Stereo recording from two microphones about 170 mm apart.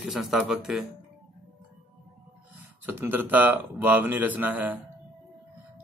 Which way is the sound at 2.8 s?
10° right (ahead or behind).